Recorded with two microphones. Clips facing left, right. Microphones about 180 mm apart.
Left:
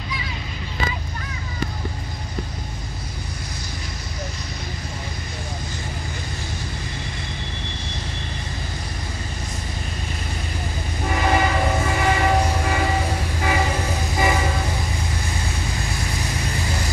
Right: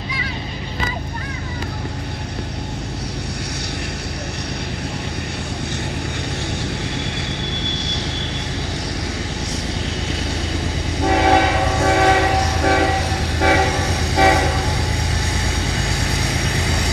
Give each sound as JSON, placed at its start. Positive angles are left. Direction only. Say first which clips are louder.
{"t": 7.5, "sound": "vehicle", "louder": "right 7 dB", "side_deg": -75}
{"t": 11.0, "sound": "train", "louder": "right 6 dB", "side_deg": -80}
{"t": 15.3, "sound": "vehicle", "louder": "right 4 dB", "side_deg": -70}